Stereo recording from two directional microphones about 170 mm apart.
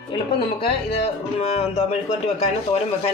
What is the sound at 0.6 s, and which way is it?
Speech, 35° left (ahead or behind).